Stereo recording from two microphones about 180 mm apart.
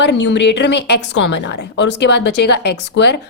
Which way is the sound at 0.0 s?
75° left (ahead or behind).